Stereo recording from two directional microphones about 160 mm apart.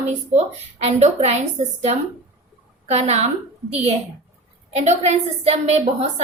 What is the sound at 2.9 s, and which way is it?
Speech, 45° right (ahead or behind).